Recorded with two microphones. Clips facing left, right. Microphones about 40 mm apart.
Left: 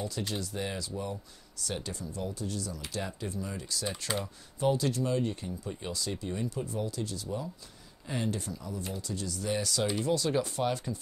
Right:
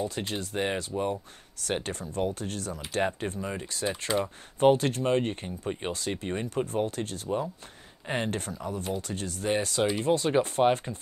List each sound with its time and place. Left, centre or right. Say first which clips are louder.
0.3 s speech: right 5 dB; right